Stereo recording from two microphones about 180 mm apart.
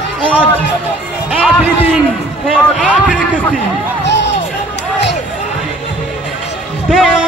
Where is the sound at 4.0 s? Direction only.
75° left (ahead or behind).